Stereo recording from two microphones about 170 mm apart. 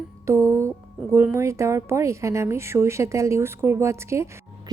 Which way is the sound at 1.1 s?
15° right (ahead or behind).